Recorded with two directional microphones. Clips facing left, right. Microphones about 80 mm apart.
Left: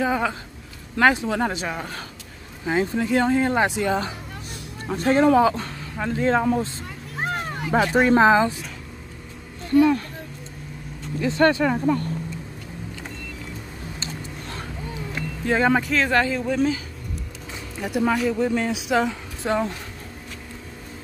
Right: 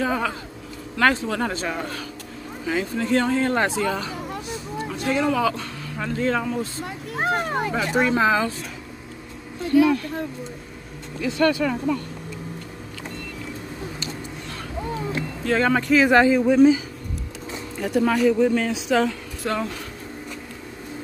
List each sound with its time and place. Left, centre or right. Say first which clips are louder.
0.0 s speech: left 1 dB; centre
2.6 s speech: left 2 dB; left
4.8 s speech: left 5 dB; left
7.2 s a sound: right 5 dB; right
7.7 s speech: left 6 dB; left
11.2 s speech: left 2 dB; left
15.4 s speech: left 1 dB; centre
15.8 s speech: right 5 dB; centre
16.1 s speech: right 5 dB; centre
17.7 s speech: right 2 dB; centre
19.0 s speech: left 1 dB; left